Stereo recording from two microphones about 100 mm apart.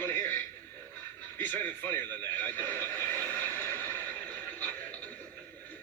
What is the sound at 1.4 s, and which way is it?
Neigh, 20° left (ahead or behind).